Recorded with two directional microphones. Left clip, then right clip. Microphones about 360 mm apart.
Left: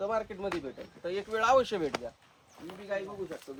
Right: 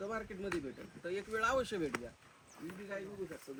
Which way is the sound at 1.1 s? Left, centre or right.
Centre.